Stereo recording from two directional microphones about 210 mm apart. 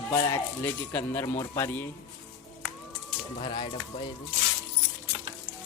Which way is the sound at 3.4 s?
20° left (ahead or behind).